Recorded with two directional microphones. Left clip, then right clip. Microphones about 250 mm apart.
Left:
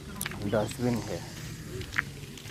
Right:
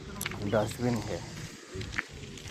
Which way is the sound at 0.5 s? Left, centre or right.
Centre.